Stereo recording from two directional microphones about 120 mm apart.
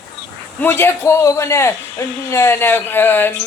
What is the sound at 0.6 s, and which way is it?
A man's voice, 20° left (ahead or behind).